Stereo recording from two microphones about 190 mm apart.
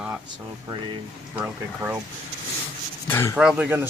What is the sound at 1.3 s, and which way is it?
Speech, 10° right (ahead or behind).